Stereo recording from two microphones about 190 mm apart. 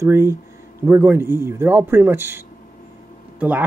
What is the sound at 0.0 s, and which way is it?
A man's voice, 15° right (ahead or behind).